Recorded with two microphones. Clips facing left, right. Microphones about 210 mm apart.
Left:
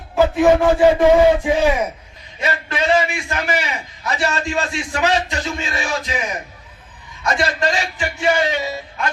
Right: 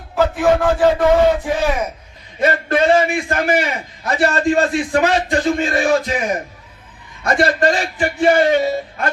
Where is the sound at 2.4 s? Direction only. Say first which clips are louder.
Right 6 dB; 55° right (ahead or behind).